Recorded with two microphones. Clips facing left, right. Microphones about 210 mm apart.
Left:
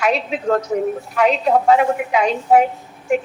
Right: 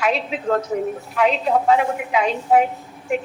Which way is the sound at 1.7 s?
60° left (ahead or behind).